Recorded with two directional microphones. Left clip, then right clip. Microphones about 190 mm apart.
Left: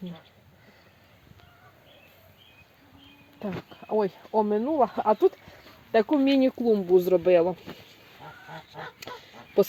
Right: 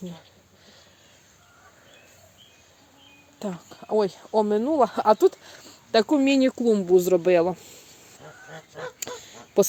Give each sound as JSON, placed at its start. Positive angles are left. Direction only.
{"t": 3.4, "sound": "speech", "side_deg": -10}
{"t": 9.0, "sound": "honk", "side_deg": -15}